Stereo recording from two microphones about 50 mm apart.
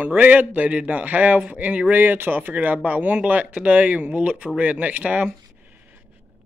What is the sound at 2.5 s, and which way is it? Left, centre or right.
Speech, right.